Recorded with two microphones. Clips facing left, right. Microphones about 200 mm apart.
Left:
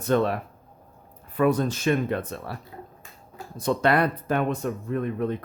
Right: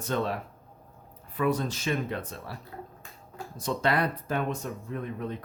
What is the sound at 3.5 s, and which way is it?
Speech, 60° left (ahead or behind).